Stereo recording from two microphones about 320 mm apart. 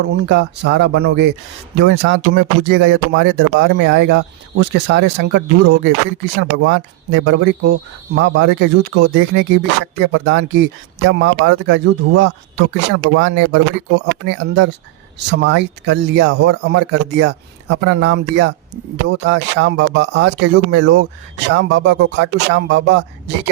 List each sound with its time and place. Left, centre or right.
0.2 s speech: right